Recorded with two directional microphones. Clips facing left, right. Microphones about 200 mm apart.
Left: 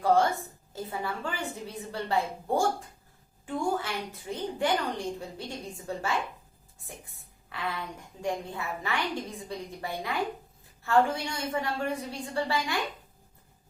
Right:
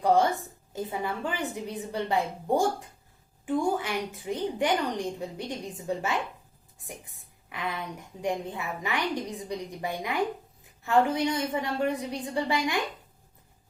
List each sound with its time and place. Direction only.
0.0 s a woman's voice: 15° right (ahead or behind)